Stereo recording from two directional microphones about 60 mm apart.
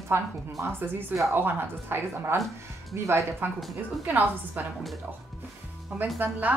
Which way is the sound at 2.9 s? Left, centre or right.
Right.